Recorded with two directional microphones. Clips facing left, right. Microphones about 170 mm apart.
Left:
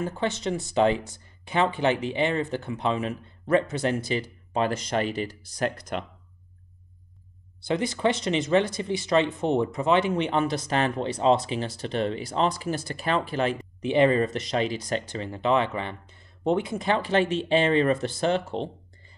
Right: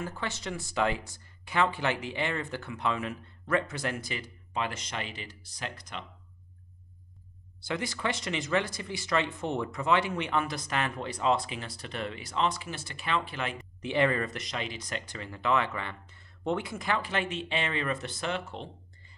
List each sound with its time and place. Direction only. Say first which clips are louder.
0.0 s speech: left 8 dB; 25° left (ahead or behind); by 6.0 s 45° left (ahead or behind)
7.6 s speech: left 8 dB; 20° left (ahead or behind); by 13.6 s 35° left (ahead or behind)
13.8 s speech: left 7 dB; 20° left (ahead or behind)